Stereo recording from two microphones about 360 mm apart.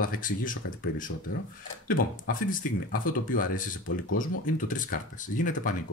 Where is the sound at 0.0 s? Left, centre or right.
Left.